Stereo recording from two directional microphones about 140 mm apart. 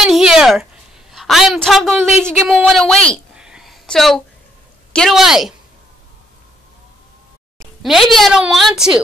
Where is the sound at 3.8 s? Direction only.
5° left (ahead or behind).